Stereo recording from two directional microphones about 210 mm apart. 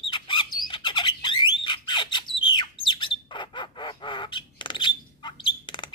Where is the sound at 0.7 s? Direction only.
20° left (ahead or behind).